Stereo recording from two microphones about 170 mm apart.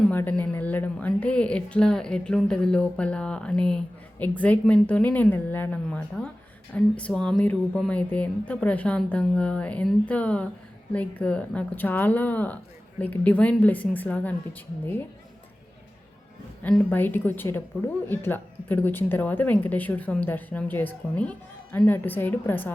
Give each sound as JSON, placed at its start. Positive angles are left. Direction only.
{"t": 0.1, "sound": "speech", "side_deg": 10}
{"t": 16.6, "sound": "speech", "side_deg": 10}